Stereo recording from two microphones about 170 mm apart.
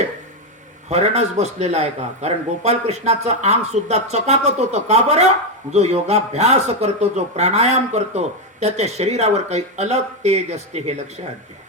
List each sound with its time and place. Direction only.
0.9 s a man's voice: 40° right (ahead or behind)